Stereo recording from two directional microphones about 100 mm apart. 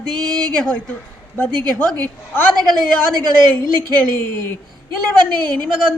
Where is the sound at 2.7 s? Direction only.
50° right (ahead or behind).